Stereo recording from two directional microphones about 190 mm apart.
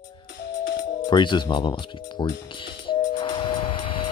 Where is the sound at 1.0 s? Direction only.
25° left (ahead or behind).